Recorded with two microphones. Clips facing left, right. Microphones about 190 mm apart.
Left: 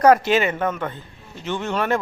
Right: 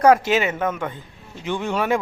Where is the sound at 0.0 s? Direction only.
10° right (ahead or behind).